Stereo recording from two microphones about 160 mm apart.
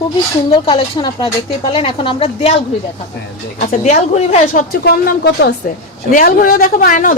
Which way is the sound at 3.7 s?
45° left (ahead or behind).